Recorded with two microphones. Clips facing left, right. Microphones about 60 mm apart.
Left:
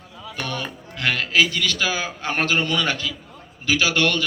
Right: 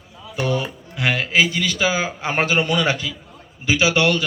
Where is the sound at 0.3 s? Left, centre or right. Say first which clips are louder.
Right 7 dB; centre.